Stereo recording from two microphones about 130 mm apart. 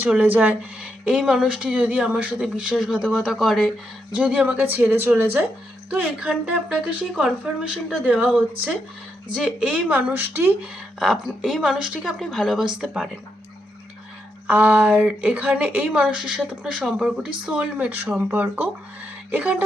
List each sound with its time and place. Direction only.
0.2 s speech: 15° right (ahead or behind)
4.1 s speech: 10° right (ahead or behind)
11.0 s speech: centre (ahead or behind)
14.4 s speech: 15° right (ahead or behind)